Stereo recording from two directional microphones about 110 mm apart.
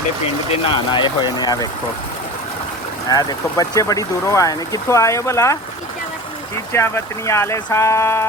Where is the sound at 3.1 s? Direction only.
35° left (ahead or behind).